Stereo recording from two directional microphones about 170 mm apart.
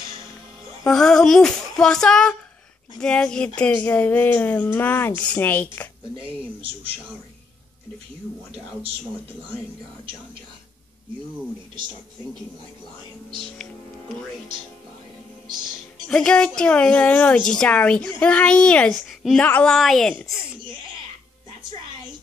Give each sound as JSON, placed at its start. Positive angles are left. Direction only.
{"t": 0.8, "sound": "a woman's voice", "side_deg": 5}
{"t": 6.1, "sound": "speech", "side_deg": -30}
{"t": 16.1, "sound": "a woman's voice", "side_deg": 5}